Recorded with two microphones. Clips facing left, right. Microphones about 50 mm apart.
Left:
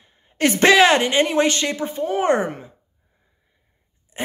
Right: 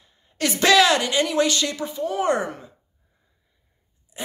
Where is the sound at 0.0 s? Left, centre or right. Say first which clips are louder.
Left 6 dB; left.